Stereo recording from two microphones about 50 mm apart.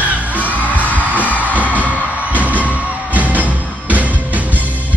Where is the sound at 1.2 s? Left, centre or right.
Left.